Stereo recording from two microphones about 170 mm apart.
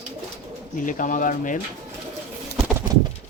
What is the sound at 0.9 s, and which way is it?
Speech, 50° left (ahead or behind).